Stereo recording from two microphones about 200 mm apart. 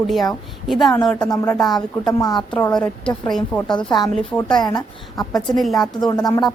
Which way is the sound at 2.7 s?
5° left (ahead or behind).